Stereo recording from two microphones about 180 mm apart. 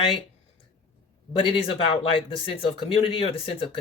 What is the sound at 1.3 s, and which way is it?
Speech, 30° left (ahead or behind).